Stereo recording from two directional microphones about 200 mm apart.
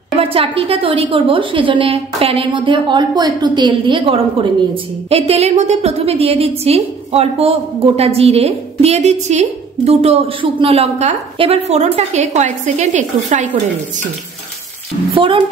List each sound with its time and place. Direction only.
0.2 s a woman's voice: 30° right (ahead or behind)
15.1 s a woman's voice: 25° right (ahead or behind)